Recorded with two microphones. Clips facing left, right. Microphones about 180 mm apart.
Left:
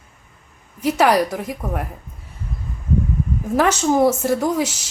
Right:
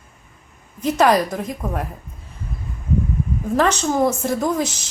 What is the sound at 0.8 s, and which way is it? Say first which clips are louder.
A woman's voice: even; 10° left (ahead or behind).